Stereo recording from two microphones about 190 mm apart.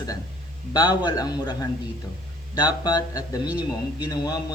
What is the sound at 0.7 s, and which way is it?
Speech, 20° left (ahead or behind).